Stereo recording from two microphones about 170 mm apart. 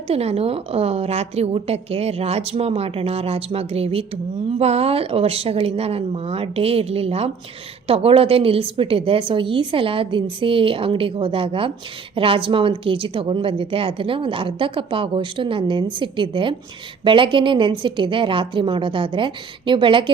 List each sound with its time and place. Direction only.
0.1 s a woman's voice: 35° right (ahead or behind)